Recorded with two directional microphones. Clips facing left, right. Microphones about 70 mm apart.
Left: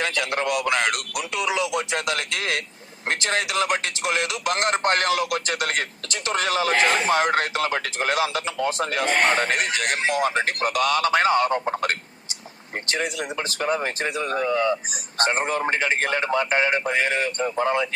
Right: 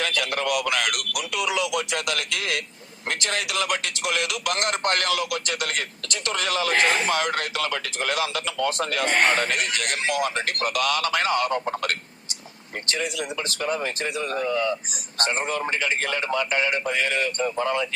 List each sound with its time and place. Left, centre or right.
0.0 s speech: left
12.9 s speech: left